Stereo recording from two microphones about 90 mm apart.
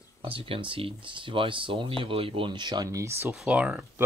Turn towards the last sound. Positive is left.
turn(degrees=-10)  # may be behind; listen again after turning